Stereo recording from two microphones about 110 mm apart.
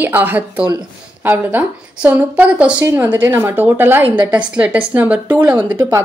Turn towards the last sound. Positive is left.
turn(degrees=-30)  # may be behind; listen again after turning